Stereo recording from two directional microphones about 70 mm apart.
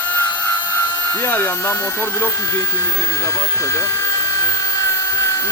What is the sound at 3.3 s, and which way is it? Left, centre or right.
Speech, left.